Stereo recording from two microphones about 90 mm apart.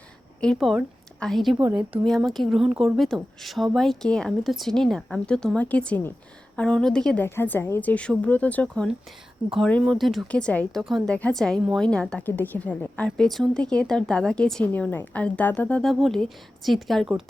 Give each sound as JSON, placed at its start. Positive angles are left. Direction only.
{"t": 0.4, "sound": "speech", "side_deg": 5}
{"t": 7.2, "sound": "speech", "side_deg": 20}
{"t": 10.3, "sound": "speech", "side_deg": 10}
{"t": 10.8, "sound": "speech", "side_deg": 0}
{"t": 11.1, "sound": "a woman's voice", "side_deg": 10}
{"t": 13.1, "sound": "speech", "side_deg": 5}
{"t": 14.7, "sound": "speech", "side_deg": 20}
{"t": 15.9, "sound": "speech", "side_deg": 0}